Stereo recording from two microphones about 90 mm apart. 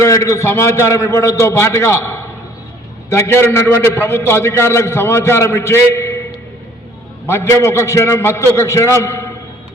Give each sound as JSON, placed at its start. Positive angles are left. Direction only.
{"t": 0.0, "sound": "a man's voice", "side_deg": 35}
{"t": 7.3, "sound": "a man's voice", "side_deg": 30}